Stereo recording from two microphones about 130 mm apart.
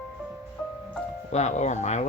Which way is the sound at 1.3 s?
60° left (ahead or behind).